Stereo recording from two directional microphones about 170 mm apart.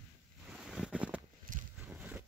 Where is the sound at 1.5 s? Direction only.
50° right (ahead or behind).